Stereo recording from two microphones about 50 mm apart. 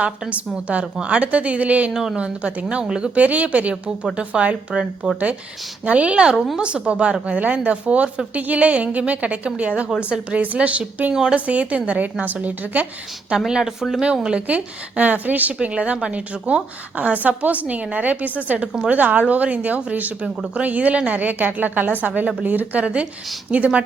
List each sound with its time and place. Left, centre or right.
0.0 s a woman's voice: right
1.9 s speech: centre
2.1 s a woman's voice: right
3.2 s a woman's voice: right
6.3 s a woman's voice: centre
6.6 s a woman's voice: centre
11.1 s speech: centre
11.3 s a woman's voice: right
13.5 s speech: centre
14.0 s speech: centre
14.4 s a woman's voice: right